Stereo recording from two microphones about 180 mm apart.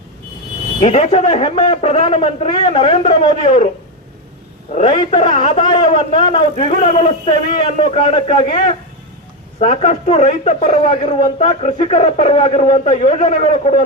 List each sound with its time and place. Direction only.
0.8 s a man's voice: 35° left (ahead or behind)
4.7 s a man's voice: 35° left (ahead or behind)
9.6 s a man's voice: 35° left (ahead or behind)